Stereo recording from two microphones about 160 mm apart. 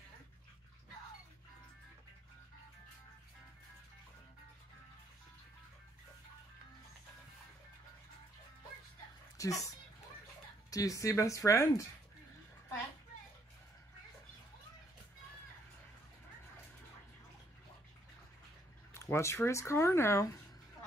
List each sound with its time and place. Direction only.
9.4 s speech: 20° left (ahead or behind)
10.7 s speech: 20° left (ahead or behind)
18.9 s speech: 15° left (ahead or behind)